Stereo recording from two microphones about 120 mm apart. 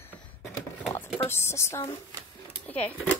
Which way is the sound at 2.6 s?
15° left (ahead or behind).